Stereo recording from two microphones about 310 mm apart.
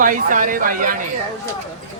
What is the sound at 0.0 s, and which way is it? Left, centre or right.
Speech, right.